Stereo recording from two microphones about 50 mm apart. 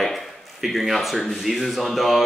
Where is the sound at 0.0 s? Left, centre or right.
Centre.